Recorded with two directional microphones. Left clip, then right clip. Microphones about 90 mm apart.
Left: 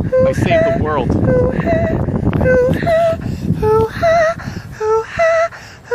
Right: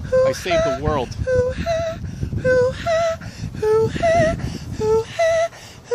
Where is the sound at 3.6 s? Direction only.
10° right (ahead or behind).